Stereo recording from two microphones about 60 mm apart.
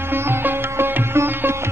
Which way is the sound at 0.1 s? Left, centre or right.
Right.